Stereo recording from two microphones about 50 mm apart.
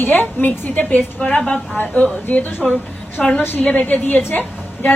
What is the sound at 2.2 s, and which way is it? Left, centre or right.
Speech, left.